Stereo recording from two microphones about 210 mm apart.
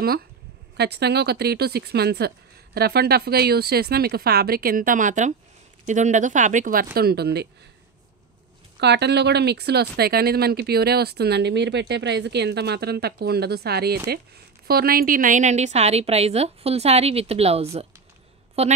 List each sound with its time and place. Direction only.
0.7 s speech: 50° right (ahead or behind)
8.7 s a woman's voice: 55° right (ahead or behind); by 18.7 s 30° right (ahead or behind)